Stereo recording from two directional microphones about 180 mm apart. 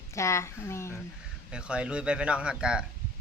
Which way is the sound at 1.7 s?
5° right (ahead or behind).